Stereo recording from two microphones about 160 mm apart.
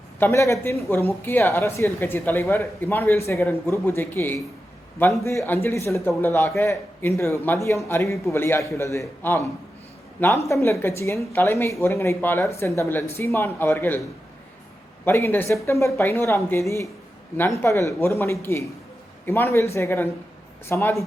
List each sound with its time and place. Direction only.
0.2 s a woman's voice: 15° left (ahead or behind)
15.0 s a woman's voice: 15° left (ahead or behind)